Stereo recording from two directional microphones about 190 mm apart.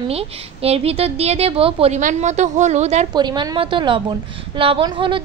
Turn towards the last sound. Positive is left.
turn(degrees=-25)  # may be behind; listen again after turning